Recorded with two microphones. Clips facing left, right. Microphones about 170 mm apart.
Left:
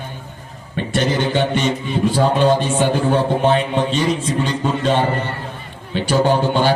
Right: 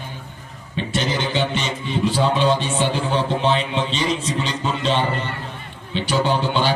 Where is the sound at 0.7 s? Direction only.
50° left (ahead or behind).